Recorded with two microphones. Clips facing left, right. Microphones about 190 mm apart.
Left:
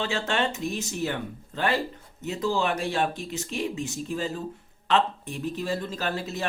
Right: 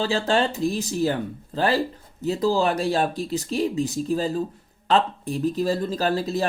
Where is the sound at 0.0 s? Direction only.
35° right (ahead or behind).